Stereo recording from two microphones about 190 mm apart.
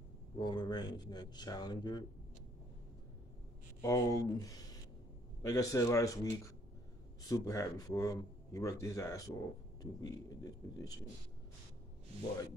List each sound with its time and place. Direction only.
0.4 s speech: 25° left (ahead or behind)
3.8 s speech: 15° left (ahead or behind)